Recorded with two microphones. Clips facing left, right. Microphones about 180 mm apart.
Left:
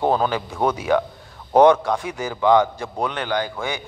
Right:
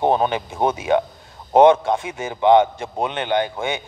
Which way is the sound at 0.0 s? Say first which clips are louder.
Right 1 dB; 20° right (ahead or behind).